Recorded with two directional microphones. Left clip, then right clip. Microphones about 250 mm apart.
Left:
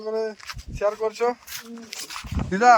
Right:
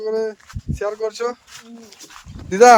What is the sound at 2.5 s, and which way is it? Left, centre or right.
Speech, right.